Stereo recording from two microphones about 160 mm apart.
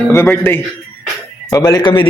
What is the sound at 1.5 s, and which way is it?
Speech, 25° left (ahead or behind).